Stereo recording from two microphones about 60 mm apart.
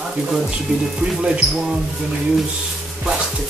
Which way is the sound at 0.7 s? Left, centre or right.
Centre.